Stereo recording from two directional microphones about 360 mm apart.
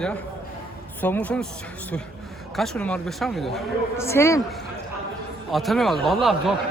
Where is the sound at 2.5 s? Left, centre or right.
Centre.